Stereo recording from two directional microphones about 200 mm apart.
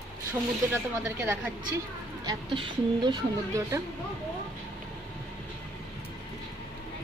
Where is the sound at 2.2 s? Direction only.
25° right (ahead or behind).